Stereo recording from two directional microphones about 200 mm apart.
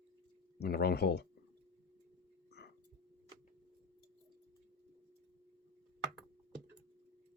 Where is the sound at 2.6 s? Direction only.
55° left (ahead or behind).